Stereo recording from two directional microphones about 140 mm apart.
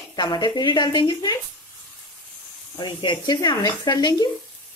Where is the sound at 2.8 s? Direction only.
35° left (ahead or behind).